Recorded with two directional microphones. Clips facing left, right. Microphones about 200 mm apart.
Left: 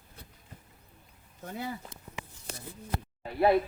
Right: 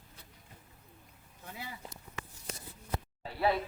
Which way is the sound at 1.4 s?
45° left (ahead or behind).